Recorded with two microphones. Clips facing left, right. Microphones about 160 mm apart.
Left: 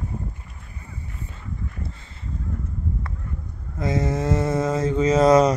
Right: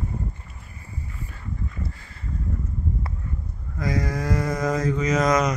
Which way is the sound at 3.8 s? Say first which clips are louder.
Left 3 dB; 25° left (ahead or behind).